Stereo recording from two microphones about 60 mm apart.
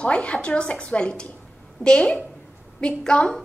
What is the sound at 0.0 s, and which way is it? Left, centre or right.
A child's voice, left.